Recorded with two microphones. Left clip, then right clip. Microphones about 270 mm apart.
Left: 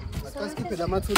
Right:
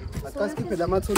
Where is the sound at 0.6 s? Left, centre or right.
Right.